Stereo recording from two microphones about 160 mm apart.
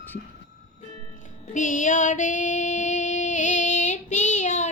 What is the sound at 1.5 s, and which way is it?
Child singing, 55° left (ahead or behind).